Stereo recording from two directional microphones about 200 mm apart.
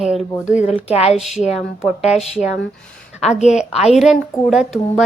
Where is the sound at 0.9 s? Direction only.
30° left (ahead or behind).